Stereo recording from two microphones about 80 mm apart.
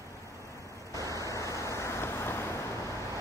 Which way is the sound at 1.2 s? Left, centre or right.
Left.